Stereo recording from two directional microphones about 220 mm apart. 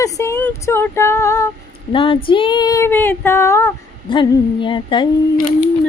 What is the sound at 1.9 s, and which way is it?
Humming, 25° left (ahead or behind).